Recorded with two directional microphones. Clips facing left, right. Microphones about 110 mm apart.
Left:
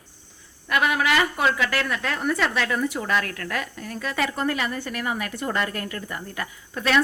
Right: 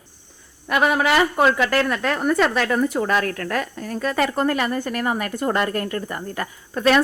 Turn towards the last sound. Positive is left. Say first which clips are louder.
# right 5 dB
turn(degrees=-45)  # may be behind; listen again after turning